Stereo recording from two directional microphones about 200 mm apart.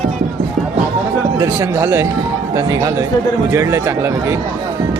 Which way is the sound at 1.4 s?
15° right (ahead or behind).